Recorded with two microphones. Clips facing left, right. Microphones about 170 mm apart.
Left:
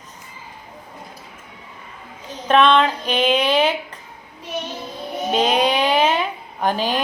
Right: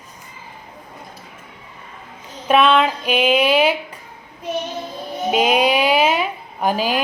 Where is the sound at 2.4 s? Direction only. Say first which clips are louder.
Even; 10° right (ahead or behind).